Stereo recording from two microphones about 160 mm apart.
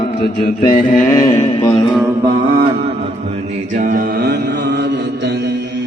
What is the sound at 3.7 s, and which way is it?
Mantra, 55° right (ahead or behind).